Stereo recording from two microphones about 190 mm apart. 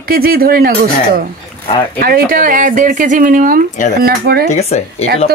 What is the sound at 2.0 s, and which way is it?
Speech, 50° right (ahead or behind).